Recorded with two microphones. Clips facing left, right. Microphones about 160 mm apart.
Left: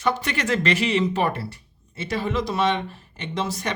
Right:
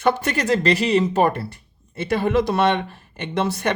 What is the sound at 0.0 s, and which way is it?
Speech, 55° right (ahead or behind).